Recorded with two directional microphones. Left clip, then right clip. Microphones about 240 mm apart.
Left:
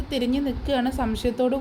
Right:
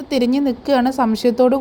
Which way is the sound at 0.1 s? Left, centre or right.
Right.